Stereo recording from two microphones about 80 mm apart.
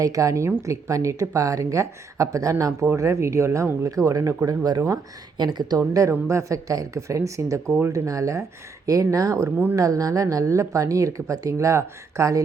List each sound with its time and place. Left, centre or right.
0.0 s speech: right
3.9 s speech: right
5.4 s speech: right
5.9 s speech: right